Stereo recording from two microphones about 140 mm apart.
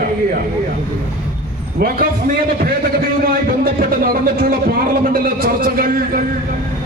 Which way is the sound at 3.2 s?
90° right.